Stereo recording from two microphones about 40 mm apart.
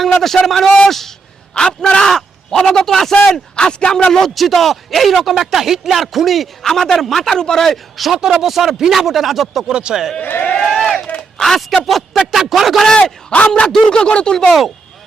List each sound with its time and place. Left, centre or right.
0.0 s a man's voice: centre
1.5 s speech: centre
3.5 s speech: left
4.4 s a man's voice: centre
7.9 s speech: centre
9.6 s speech: centre
10.7 s a sound: centre
11.9 s speech: centre
13.5 s a man's voice: centre
14.4 s speech: centre